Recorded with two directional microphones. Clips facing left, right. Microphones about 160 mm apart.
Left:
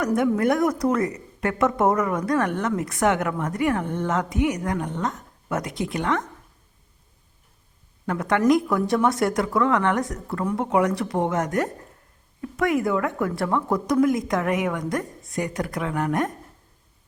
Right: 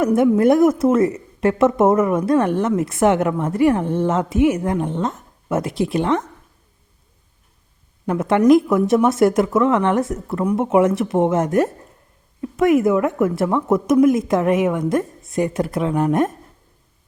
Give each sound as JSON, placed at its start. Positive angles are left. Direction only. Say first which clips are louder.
{"t": 0.0, "sound": "speech", "louder": "right 6 dB", "side_deg": -25}
{"t": 8.0, "sound": "speech", "louder": "right 6 dB", "side_deg": -20}